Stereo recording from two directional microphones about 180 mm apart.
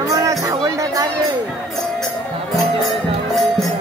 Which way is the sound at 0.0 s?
15° right (ahead or behind).